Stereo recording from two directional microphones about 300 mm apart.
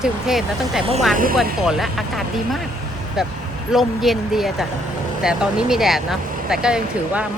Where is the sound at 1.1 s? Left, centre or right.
Right.